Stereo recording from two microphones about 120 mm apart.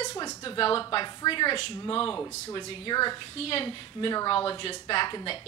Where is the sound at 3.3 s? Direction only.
55° left (ahead or behind).